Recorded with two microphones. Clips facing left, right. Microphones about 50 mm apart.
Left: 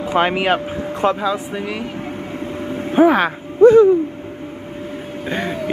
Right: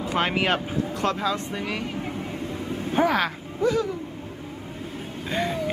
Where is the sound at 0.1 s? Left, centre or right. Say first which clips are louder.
Left 7 dB; centre.